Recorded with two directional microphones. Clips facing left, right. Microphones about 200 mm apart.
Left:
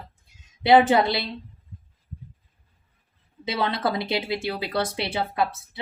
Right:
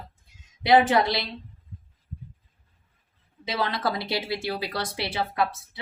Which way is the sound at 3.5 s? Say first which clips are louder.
Left 2 dB; 25° left (ahead or behind).